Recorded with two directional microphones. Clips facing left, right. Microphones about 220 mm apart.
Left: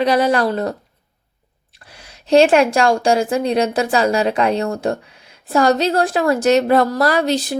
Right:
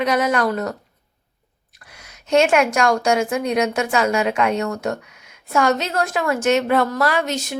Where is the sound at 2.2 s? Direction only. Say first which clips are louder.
Left 4 dB; 35° left (ahead or behind).